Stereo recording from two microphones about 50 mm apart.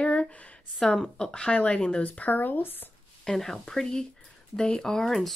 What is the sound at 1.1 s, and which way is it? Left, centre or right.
Speech, centre.